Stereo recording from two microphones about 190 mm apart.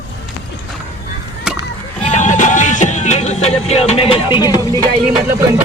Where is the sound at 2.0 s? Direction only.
40° left (ahead or behind); by 4.8 s 20° left (ahead or behind).